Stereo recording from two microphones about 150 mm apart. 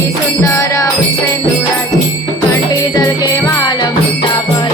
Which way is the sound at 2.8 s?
25° left (ahead or behind).